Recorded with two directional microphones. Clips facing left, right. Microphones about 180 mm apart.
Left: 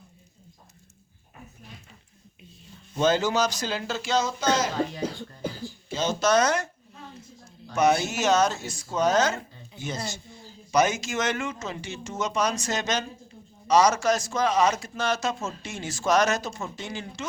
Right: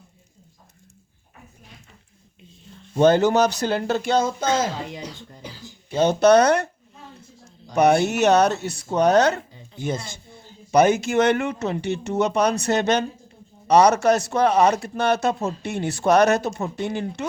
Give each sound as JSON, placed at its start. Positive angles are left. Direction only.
{"t": 3.0, "sound": "speech", "side_deg": -60}
{"t": 4.9, "sound": "speech", "side_deg": 50}
{"t": 5.9, "sound": "speech", "side_deg": -60}
{"t": 7.8, "sound": "speech", "side_deg": -60}
{"t": 9.7, "sound": "speech", "side_deg": -50}